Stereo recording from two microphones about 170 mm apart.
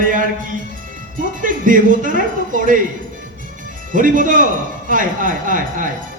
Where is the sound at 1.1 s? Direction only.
50° right (ahead or behind).